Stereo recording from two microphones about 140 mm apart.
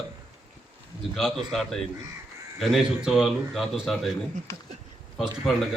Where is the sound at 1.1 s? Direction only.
Centre (ahead or behind).